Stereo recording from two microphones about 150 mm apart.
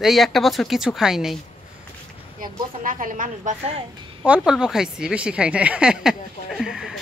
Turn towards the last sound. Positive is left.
turn(degrees=-5)  # may be behind; listen again after turning